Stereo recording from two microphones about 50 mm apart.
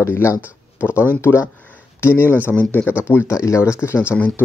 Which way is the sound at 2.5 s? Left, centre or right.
Left.